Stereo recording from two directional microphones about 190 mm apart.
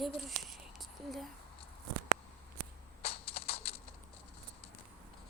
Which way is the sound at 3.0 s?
30° left (ahead or behind).